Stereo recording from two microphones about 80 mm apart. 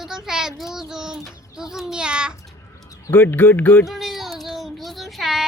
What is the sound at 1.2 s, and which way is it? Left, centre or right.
A child's voice, centre.